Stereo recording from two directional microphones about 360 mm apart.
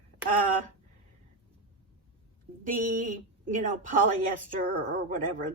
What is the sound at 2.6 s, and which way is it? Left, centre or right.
A woman's voice, right.